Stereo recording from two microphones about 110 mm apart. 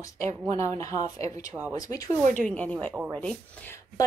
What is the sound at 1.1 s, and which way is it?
Speech, 75° right (ahead or behind).